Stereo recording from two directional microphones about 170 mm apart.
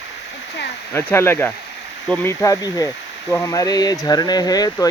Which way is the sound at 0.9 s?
15° left (ahead or behind).